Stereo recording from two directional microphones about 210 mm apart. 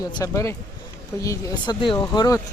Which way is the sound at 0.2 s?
15° left (ahead or behind).